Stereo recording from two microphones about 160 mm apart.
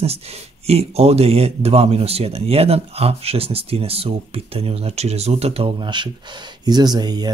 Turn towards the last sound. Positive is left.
turn(degrees=-25)  # may be behind; listen again after turning